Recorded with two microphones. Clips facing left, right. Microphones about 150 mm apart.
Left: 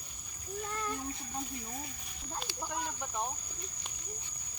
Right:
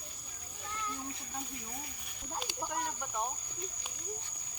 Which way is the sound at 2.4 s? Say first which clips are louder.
Right 1 dB; 5° right (ahead or behind).